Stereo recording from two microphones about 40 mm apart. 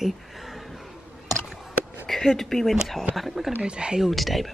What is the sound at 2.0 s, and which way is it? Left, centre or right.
Speech, centre.